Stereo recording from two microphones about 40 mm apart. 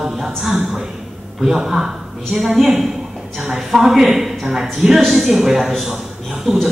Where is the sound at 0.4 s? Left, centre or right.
Centre.